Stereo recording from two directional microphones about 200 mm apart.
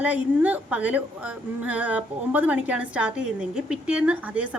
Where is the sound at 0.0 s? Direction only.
10° right (ahead or behind).